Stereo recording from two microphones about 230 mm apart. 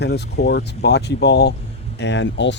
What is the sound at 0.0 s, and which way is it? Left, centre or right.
Speech, left.